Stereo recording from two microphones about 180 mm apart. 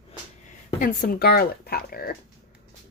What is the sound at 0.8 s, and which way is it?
Speech, 55° left (ahead or behind).